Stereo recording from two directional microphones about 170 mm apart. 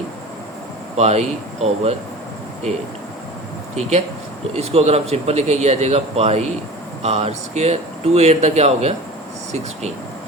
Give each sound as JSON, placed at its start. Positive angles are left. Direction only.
{"t": 0.9, "sound": "speech", "side_deg": -40}
{"t": 3.8, "sound": "speech", "side_deg": -40}